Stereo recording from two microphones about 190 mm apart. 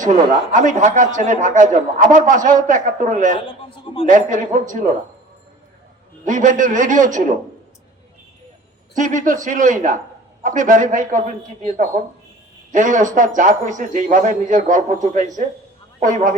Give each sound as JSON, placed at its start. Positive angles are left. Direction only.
{"t": 0.5, "sound": "a man's voice", "side_deg": -40}
{"t": 3.3, "sound": "a man's voice", "side_deg": 30}
{"t": 4.0, "sound": "speech", "side_deg": -45}
{"t": 6.2, "sound": "speech", "side_deg": -40}
{"t": 9.0, "sound": "speech", "side_deg": -40}
{"t": 12.7, "sound": "a man's voice", "side_deg": -40}